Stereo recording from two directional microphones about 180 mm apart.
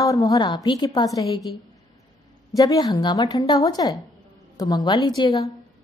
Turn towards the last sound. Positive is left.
turn(degrees=20)  # may be behind; listen again after turning